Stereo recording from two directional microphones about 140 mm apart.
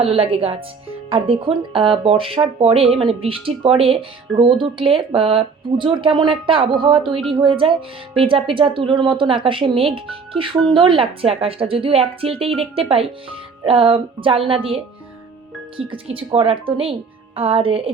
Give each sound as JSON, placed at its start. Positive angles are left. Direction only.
{"t": 0.0, "sound": "a woman's voice", "side_deg": -45}
{"t": 15.9, "sound": "speech", "side_deg": -45}